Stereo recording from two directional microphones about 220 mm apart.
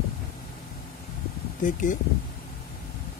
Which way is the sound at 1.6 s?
35° left (ahead or behind).